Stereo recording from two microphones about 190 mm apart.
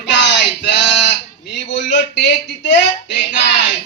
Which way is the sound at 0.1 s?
65° left (ahead or behind).